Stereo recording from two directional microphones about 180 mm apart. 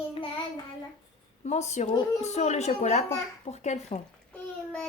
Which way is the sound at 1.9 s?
20° left (ahead or behind).